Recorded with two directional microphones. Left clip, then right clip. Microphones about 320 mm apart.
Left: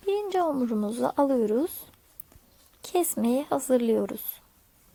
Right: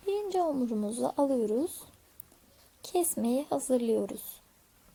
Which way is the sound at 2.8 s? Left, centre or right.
Centre.